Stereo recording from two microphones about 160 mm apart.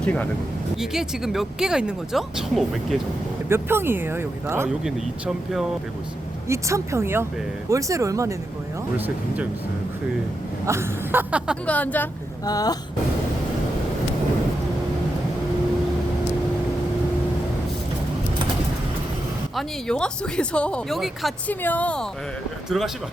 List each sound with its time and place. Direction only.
0.0 s speech: 10° left (ahead or behind)
0.8 s speech: 5° right (ahead or behind)
3.5 s speech: 15° right (ahead or behind)
4.8 s speech: 5° right (ahead or behind)
6.5 s speech: 20° right (ahead or behind)
10.7 s speech: 15° right (ahead or behind)
11.6 s a woman's voice: 10° left (ahead or behind)
12.5 s speech: 25° left (ahead or behind)
19.5 s speech: 5° left (ahead or behind)
21.4 s a woman's voice: 10° left (ahead or behind)